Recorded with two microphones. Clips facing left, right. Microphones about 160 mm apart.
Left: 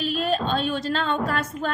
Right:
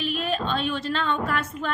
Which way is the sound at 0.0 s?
40° left (ahead or behind).